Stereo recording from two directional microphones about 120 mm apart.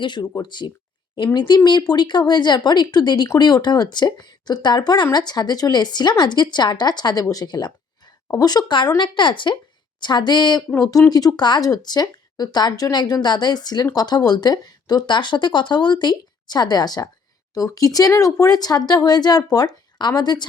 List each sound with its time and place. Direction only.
0.0 s speech: 40° left (ahead or behind)